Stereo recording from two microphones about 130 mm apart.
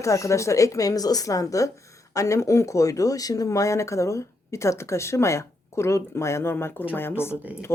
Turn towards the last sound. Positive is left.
turn(degrees=20)  # may be behind; listen again after turning